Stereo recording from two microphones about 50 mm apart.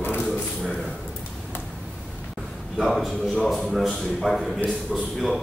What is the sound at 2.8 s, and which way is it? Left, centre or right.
A man's voice, centre.